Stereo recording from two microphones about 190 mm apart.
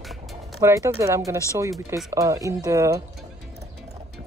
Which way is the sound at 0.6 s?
15° right (ahead or behind).